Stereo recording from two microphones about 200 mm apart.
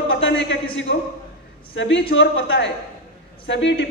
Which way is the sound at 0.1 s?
55° left (ahead or behind).